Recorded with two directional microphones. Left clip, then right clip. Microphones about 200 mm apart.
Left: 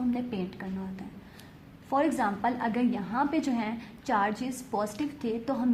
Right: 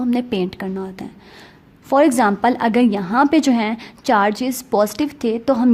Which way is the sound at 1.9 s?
45° right (ahead or behind).